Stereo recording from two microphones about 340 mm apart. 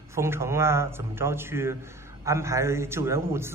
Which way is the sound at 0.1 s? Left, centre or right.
Centre.